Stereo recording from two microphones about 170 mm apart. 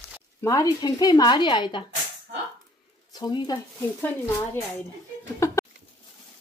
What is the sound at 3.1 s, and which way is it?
Speech, 25° left (ahead or behind).